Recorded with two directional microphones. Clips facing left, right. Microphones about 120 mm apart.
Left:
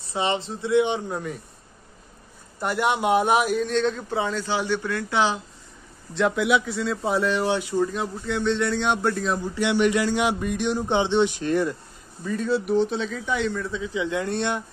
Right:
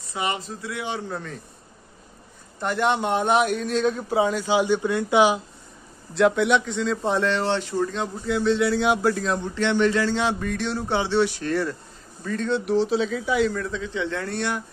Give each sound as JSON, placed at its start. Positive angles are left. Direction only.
{"t": 0.0, "sound": "speech", "side_deg": 30}
{"t": 2.6, "sound": "speech", "side_deg": 5}
{"t": 3.9, "sound": "speech", "side_deg": -15}
{"t": 6.1, "sound": "speech", "side_deg": 0}
{"t": 8.3, "sound": "speech", "side_deg": -5}
{"t": 12.3, "sound": "speech", "side_deg": 5}